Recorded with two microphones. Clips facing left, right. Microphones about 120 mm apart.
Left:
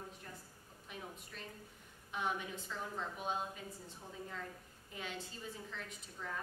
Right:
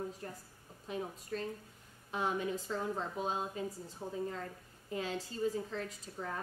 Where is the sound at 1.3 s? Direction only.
45° right (ahead or behind).